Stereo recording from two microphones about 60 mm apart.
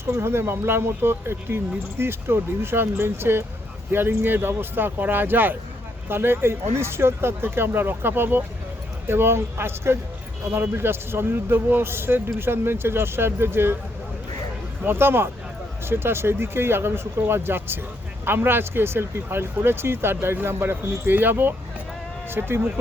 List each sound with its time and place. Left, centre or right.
0.0 s speech: right
14.8 s speech: right